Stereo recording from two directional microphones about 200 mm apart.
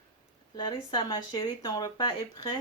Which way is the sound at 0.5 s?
20° left (ahead or behind).